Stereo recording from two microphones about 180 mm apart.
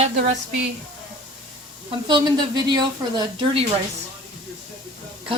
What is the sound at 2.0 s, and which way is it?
Speech, 25° right (ahead or behind).